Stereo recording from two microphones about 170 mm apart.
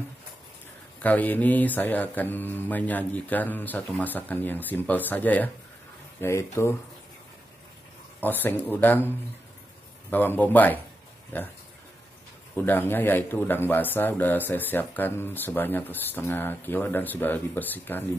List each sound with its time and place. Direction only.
0.9 s speech: 10° left (ahead or behind)
8.2 s speech: 10° left (ahead or behind)
12.5 s speech: 10° left (ahead or behind)